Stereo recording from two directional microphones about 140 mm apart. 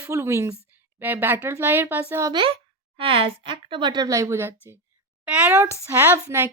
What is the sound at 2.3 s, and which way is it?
A woman's voice, 35° right (ahead or behind).